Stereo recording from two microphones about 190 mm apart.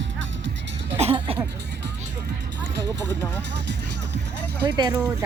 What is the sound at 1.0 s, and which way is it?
Speech, 30° right (ahead or behind).